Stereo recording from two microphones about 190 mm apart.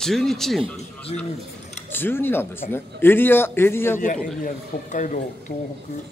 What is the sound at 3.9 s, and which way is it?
Speech, 45° left (ahead or behind).